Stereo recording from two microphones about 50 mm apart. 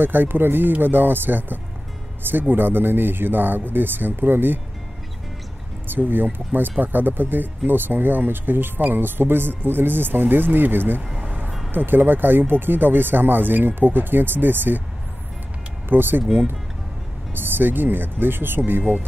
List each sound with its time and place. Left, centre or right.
0.0 s speech: right
5.9 s speech: right
11.1 s music: right
11.7 s speech: right
15.9 s speech: right
17.3 s speech: right